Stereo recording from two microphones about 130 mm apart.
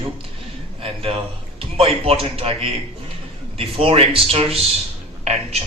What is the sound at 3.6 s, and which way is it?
A man's voice, 45° right (ahead or behind).